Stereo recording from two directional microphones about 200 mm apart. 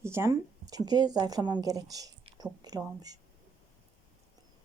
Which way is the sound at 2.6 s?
20° right (ahead or behind).